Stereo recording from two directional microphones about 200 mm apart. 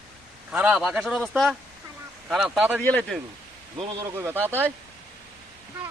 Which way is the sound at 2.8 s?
5° left (ahead or behind).